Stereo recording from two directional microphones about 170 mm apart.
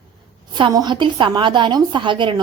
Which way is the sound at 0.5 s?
25° right (ahead or behind).